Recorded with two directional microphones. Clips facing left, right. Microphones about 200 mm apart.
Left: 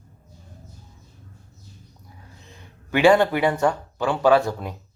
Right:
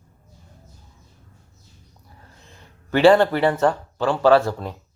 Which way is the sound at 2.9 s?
15° left (ahead or behind).